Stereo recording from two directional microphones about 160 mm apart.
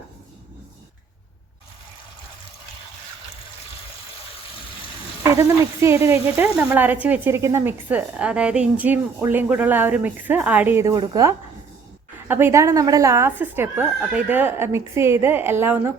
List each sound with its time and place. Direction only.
5.4 s speech: 15° right (ahead or behind)
10.9 s a woman's voice: 25° right (ahead or behind)